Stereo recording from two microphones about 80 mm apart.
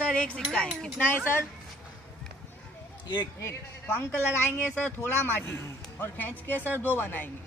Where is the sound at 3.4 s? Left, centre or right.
Left.